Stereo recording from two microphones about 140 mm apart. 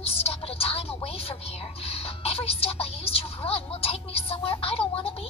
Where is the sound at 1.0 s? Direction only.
45° left (ahead or behind).